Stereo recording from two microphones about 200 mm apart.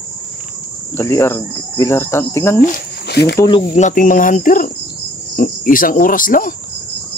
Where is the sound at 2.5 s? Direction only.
50° left (ahead or behind).